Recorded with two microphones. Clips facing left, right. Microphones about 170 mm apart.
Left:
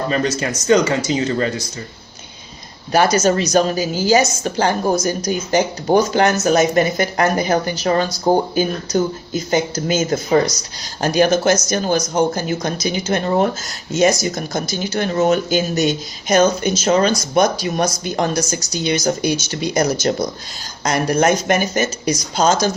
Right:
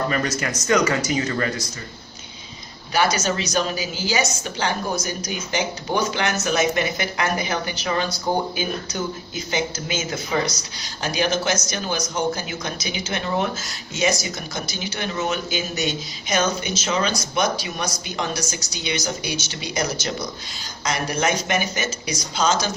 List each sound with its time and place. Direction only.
0.1 s speech: 25° left (ahead or behind)
2.9 s a woman's voice: 45° left (ahead or behind)